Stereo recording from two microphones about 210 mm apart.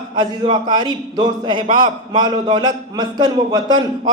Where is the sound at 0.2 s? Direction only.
20° right (ahead or behind).